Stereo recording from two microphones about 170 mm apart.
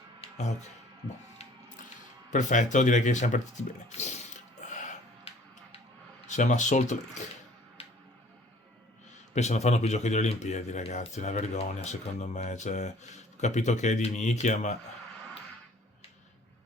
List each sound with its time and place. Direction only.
0.2 s music: 40° left (ahead or behind)
2.3 s speech: 45° left (ahead or behind)
9.3 s speech: 40° left (ahead or behind)